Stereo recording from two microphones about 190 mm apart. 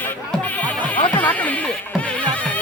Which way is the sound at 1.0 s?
10° left (ahead or behind).